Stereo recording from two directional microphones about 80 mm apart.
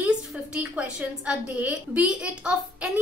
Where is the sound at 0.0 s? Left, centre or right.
Centre.